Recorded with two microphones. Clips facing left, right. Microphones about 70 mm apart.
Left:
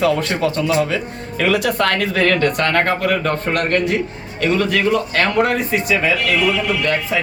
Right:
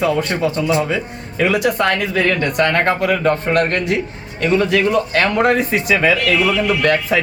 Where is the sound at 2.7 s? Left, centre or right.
Right.